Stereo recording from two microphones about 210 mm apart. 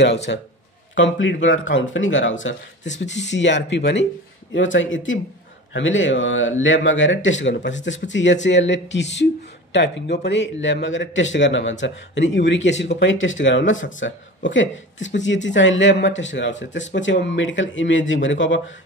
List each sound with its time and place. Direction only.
0.3 s speech: 55° left (ahead or behind)